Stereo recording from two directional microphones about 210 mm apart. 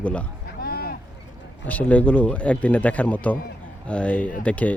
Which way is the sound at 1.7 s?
5° left (ahead or behind).